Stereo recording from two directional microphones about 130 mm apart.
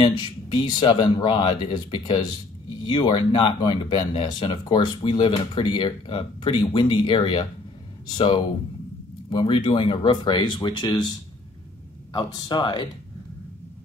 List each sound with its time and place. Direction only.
0.0 s speech: 35° left (ahead or behind)